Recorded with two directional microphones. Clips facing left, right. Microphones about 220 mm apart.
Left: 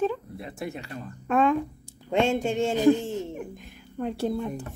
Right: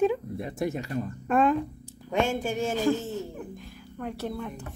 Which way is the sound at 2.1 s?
25° left (ahead or behind).